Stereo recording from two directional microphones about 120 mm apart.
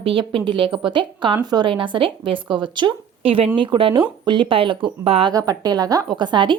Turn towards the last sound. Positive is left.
turn(degrees=-40)  # may be behind; listen again after turning